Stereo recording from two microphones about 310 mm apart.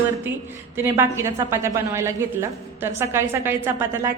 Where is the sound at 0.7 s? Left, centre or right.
Centre.